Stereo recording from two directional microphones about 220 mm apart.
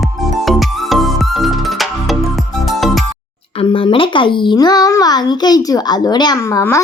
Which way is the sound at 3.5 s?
25° left (ahead or behind).